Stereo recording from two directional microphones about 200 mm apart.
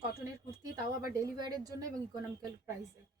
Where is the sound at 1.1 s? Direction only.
20° right (ahead or behind).